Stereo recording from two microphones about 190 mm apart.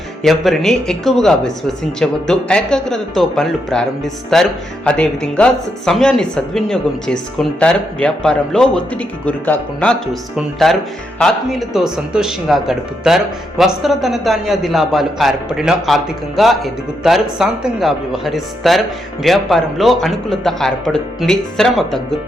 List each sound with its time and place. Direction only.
0.2 s speech: centre (ahead or behind)